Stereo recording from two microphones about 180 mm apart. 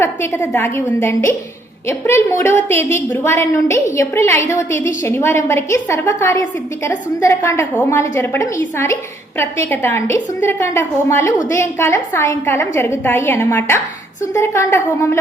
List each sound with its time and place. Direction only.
0.0 s a woman's voice: 15° left (ahead or behind)